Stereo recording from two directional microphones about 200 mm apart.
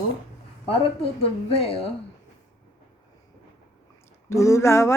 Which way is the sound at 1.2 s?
30° left (ahead or behind).